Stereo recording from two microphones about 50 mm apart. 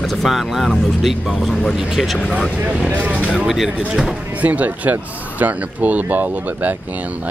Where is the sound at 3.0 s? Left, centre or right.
Right.